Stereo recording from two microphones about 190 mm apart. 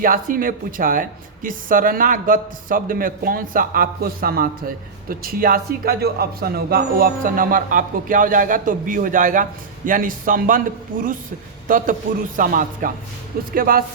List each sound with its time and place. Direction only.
0.0 s speech: 45° right (ahead or behind)